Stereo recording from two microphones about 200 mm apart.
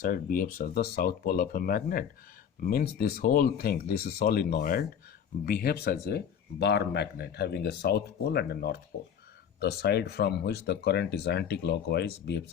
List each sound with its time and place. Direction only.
0.0 s speech: 45° left (ahead or behind)